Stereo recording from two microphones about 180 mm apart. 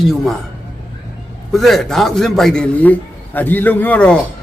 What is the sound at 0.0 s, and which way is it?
Speech, centre (ahead or behind).